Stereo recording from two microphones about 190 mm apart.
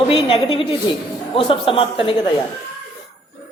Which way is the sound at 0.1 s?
30° left (ahead or behind).